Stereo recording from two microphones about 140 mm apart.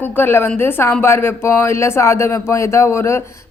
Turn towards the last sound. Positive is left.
turn(degrees=20)  # may be behind; listen again after turning